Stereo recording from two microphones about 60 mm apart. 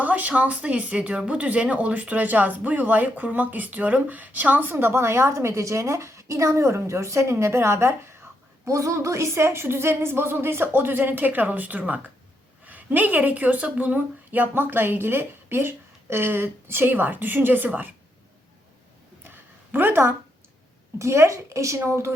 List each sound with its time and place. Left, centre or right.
0.0 s speech: right
8.6 s a woman's voice: right
19.7 s a woman's voice: right
21.0 s a woman's voice: right